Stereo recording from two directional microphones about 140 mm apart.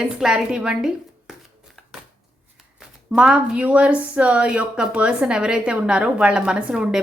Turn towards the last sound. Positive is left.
turn(degrees=-5)  # may be behind; listen again after turning